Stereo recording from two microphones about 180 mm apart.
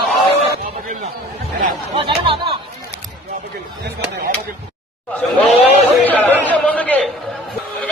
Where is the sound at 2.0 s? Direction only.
30° right (ahead or behind).